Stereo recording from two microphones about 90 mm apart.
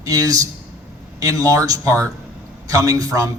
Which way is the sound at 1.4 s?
40° right (ahead or behind).